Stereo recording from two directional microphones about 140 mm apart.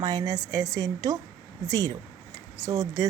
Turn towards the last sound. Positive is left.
turn(degrees=-25)  # may be behind; listen again after turning